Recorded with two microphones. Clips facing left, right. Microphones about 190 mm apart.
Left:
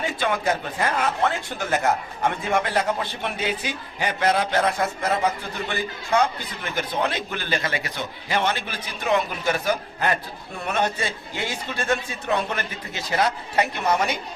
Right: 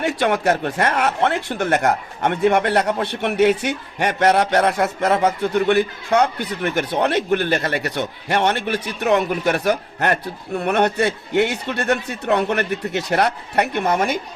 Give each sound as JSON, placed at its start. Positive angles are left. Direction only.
{"t": 0.0, "sound": "a man's voice", "side_deg": -70}